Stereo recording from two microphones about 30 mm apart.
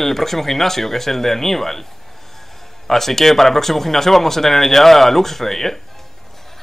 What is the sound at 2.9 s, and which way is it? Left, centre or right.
Speech, centre.